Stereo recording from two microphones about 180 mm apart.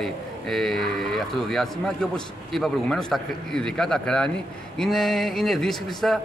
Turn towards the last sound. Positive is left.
turn(degrees=0)  # may be behind; listen again after turning